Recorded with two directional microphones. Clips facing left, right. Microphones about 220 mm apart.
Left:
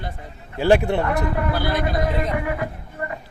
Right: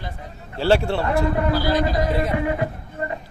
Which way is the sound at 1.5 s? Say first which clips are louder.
Right 3 dB; 55° left (ahead or behind).